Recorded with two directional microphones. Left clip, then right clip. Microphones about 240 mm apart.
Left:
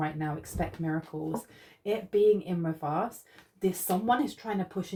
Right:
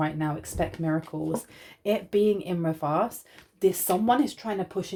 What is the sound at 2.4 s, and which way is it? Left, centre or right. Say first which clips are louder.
Speech: right 5 dB; right.